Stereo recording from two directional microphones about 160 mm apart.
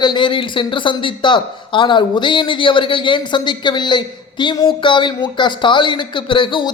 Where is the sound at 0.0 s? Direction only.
30° left (ahead or behind).